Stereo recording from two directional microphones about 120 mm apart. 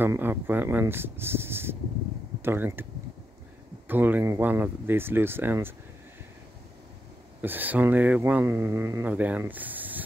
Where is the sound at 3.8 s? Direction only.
15° right (ahead or behind).